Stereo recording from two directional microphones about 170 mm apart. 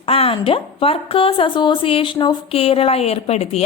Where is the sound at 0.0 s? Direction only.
35° left (ahead or behind).